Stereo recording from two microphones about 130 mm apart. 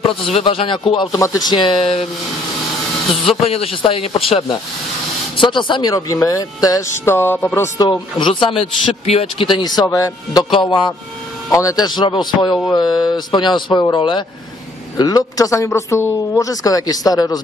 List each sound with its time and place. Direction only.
0.3 s speech: 45° left (ahead or behind)
1.1 s a man's voice: 25° left (ahead or behind); by 2.0 s 45° left (ahead or behind)
3.1 s speech: centre (ahead or behind)
3.4 s speech: 50° left (ahead or behind); by 7.9 s 25° left (ahead or behind)
7.9 s a man's voice: 40° left (ahead or behind)
10.5 s a man's voice: 40° left (ahead or behind)
11.5 s a man's voice: 30° left (ahead or behind)